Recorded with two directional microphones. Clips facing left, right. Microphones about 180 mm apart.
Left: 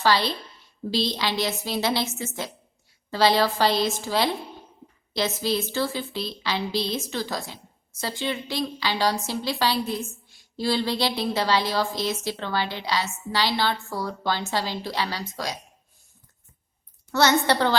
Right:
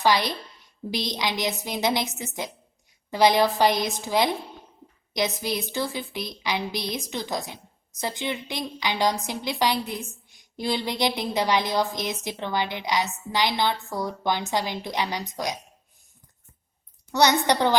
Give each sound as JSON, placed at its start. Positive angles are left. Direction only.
{"t": 0.0, "sound": "a woman's voice", "side_deg": -15}
{"t": 17.1, "sound": "a woman's voice", "side_deg": -15}